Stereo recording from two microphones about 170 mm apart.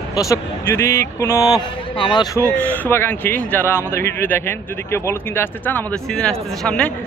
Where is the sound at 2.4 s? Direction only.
10° left (ahead or behind).